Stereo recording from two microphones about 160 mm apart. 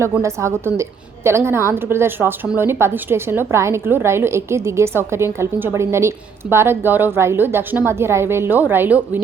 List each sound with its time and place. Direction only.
0.0 s a woman's voice: 20° right (ahead or behind)